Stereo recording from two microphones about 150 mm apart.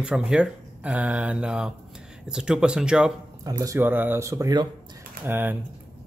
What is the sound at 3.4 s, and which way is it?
Speech, 25° right (ahead or behind).